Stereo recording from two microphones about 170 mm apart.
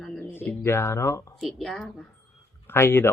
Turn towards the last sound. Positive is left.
turn(degrees=15)  # may be behind; listen again after turning